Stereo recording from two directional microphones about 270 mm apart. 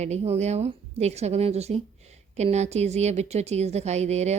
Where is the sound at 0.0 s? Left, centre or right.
Right.